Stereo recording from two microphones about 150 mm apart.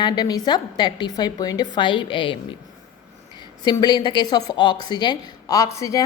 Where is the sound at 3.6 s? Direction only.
30° left (ahead or behind).